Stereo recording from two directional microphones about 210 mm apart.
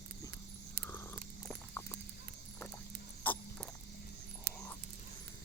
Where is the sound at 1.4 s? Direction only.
10° left (ahead or behind).